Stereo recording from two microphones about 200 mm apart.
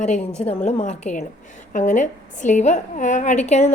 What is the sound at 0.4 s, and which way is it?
A woman's voice, 35° left (ahead or behind).